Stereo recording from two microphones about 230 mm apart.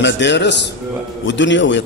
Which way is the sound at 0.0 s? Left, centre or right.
Left.